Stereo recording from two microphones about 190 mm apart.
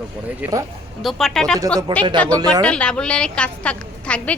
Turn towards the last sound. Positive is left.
turn(degrees=5)  # may be behind; listen again after turning